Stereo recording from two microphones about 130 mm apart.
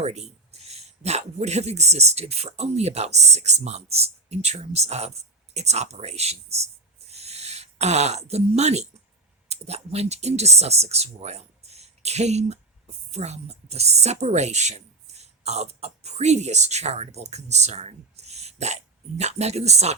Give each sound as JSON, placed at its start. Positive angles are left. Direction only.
{"t": 0.0, "sound": "speech", "side_deg": -55}
{"t": 7.1, "sound": "a sound", "side_deg": -55}
{"t": 9.5, "sound": "speech", "side_deg": -55}